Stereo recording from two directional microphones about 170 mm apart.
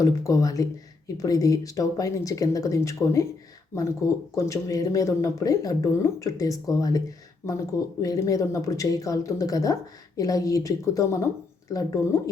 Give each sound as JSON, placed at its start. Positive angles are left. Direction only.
{"t": 0.0, "sound": "speech", "side_deg": 20}
{"t": 8.0, "sound": "speech", "side_deg": 20}